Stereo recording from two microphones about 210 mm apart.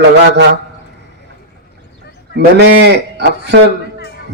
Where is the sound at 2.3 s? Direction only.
55° right (ahead or behind).